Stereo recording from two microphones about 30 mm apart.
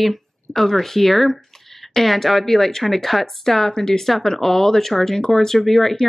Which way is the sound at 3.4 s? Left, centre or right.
Centre.